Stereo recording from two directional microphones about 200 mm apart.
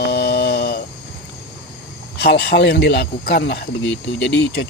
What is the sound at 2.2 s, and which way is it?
Speech, 55° left (ahead or behind).